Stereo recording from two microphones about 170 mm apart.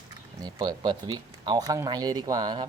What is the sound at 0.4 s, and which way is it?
Speech, 20° right (ahead or behind).